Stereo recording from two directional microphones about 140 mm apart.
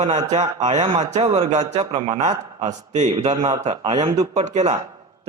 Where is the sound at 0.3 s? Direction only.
55° right (ahead or behind).